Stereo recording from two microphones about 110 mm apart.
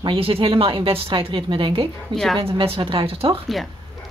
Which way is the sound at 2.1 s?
5° left (ahead or behind).